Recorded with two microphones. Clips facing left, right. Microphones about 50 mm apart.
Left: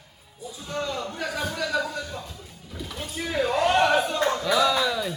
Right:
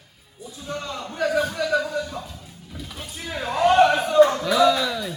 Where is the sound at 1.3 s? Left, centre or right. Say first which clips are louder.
Right 8 dB; centre.